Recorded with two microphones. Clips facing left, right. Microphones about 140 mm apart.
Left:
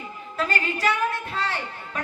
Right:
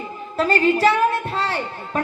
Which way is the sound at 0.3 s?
30° right (ahead or behind).